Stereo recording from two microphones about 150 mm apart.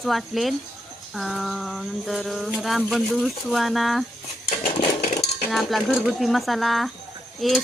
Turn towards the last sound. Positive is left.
turn(degrees=0)  # may be behind; listen again after turning